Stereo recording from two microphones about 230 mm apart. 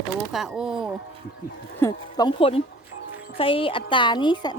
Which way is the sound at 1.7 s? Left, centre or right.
Centre.